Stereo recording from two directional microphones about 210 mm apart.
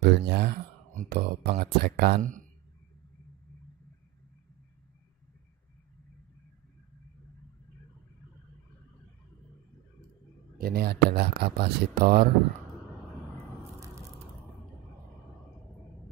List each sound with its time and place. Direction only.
0.0 s speech: 50° right (ahead or behind)
10.6 s speech: 50° right (ahead or behind)
13.6 s a sound: 15° right (ahead or behind)